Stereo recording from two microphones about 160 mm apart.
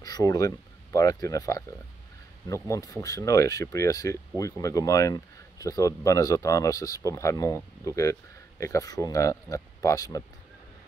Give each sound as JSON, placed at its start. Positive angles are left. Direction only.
{"t": 0.0, "sound": "speech", "side_deg": 20}